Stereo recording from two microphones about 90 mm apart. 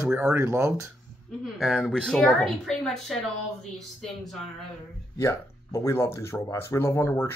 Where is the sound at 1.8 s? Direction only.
5° left (ahead or behind).